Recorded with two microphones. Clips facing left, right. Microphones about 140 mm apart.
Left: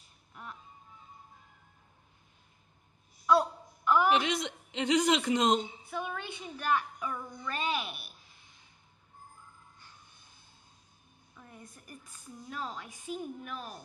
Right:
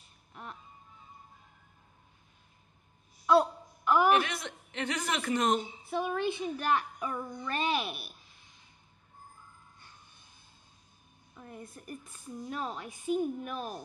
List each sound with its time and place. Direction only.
0.3 s music: 25° right (ahead or behind)
3.3 s a sound: 20° right (ahead or behind)
4.1 s a woman's voice: 20° left (ahead or behind)
5.9 s a woman's voice: 30° right (ahead or behind)
11.5 s a woman's voice: 30° right (ahead or behind)